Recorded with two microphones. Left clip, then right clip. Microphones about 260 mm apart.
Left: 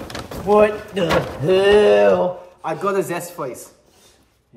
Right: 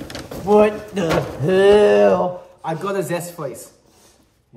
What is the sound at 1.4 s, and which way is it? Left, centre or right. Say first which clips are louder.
Speech: right 1 dB; centre.